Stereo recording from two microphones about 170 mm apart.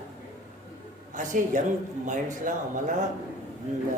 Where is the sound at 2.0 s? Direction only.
50° right (ahead or behind).